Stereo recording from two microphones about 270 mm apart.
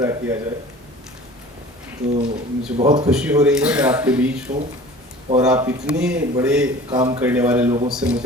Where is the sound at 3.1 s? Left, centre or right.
Centre.